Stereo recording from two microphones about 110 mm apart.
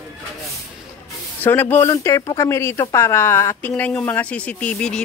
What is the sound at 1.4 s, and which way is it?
Speech, 20° left (ahead or behind).